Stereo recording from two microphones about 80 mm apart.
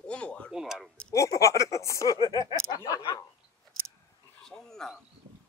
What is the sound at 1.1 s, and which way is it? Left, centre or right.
Speech, left.